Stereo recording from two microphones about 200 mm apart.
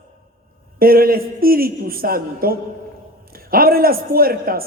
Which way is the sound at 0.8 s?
45° right (ahead or behind).